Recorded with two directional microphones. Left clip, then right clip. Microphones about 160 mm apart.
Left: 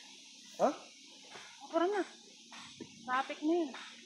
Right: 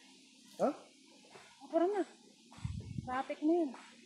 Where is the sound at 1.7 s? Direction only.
15° right (ahead or behind).